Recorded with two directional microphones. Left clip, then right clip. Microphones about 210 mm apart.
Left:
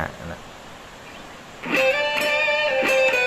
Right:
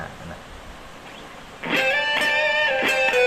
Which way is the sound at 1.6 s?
30° right (ahead or behind).